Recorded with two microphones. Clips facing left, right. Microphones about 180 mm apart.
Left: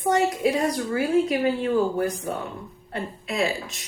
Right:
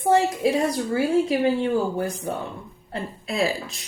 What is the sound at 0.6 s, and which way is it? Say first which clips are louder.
Speech: right 1 dB; 30° right (ahead or behind).